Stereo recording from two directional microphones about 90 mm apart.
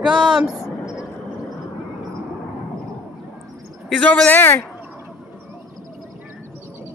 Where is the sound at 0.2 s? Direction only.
5° right (ahead or behind).